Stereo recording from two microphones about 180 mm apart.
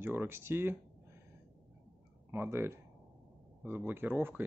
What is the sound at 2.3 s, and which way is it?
Speech, 15° right (ahead or behind).